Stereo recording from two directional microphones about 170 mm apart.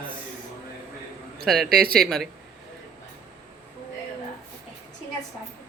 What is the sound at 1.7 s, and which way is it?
Speech, 65° right (ahead or behind).